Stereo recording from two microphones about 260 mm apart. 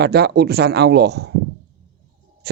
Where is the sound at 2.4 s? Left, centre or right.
Right.